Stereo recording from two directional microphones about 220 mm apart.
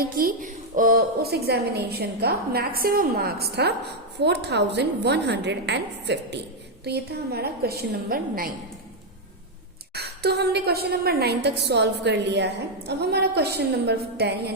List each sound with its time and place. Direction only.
0.0 s a woman's voice: 40° right (ahead or behind)
9.9 s a woman's voice: 50° right (ahead or behind)